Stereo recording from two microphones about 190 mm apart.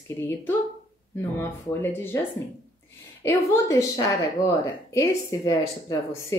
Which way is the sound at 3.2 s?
15° left (ahead or behind).